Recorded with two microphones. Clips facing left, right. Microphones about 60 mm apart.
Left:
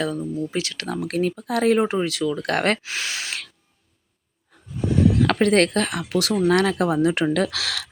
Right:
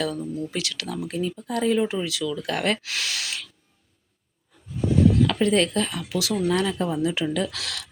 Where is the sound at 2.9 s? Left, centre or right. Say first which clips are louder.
Left 1 dB; left.